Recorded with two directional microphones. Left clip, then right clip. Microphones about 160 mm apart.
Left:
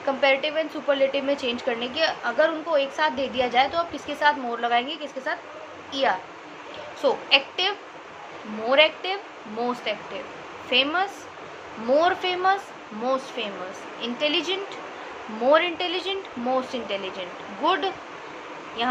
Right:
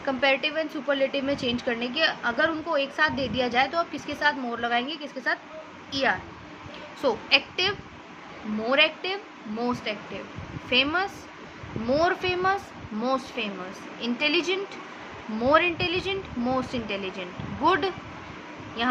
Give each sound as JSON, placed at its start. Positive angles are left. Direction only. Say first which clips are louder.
{"t": 0.0, "sound": "a woman's voice", "louder": "left 2 dB", "side_deg": -25}